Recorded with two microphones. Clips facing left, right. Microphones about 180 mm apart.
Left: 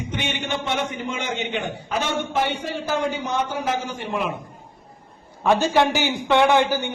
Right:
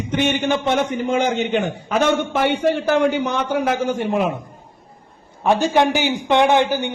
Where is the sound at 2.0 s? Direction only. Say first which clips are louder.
Right 7 dB; 60° right (ahead or behind).